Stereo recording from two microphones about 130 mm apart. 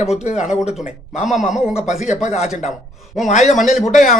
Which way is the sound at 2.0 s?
65° left (ahead or behind).